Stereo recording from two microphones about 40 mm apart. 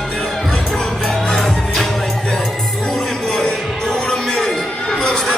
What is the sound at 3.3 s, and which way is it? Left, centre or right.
Music, centre.